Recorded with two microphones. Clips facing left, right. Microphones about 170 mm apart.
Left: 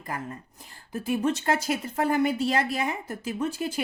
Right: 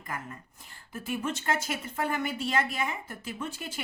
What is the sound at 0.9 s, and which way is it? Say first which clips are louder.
Speech: left 7 dB; 35° left (ahead or behind).